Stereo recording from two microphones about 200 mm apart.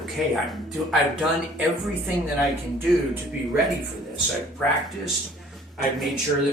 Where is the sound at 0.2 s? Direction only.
Centre (ahead or behind).